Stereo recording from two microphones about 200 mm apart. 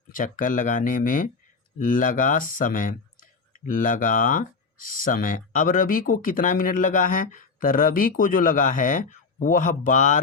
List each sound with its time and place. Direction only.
0.1 s speech: 40° left (ahead or behind)